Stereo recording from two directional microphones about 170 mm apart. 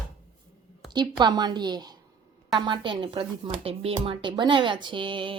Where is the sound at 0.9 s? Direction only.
25° right (ahead or behind).